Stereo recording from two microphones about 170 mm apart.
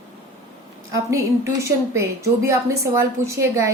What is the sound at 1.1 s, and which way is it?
A woman's voice, 15° right (ahead or behind).